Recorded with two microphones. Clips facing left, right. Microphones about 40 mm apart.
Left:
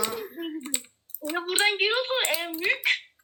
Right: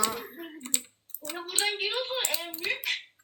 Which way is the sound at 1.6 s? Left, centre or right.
Left.